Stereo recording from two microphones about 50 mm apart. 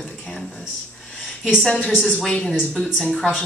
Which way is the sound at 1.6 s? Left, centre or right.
Centre.